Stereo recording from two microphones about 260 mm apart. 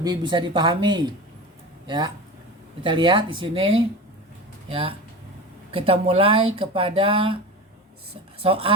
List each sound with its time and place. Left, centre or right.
0.0 s speech: centre
8.4 s speech: right